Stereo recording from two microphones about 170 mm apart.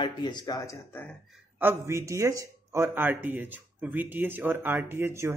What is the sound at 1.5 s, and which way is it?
Speech, 15° right (ahead or behind).